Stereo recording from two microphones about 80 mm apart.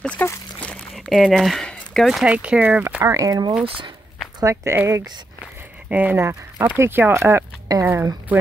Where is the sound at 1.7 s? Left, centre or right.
Centre.